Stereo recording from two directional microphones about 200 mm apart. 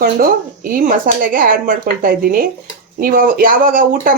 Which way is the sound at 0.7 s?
45° right (ahead or behind).